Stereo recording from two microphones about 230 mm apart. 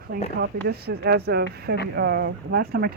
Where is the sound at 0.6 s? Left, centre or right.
Right.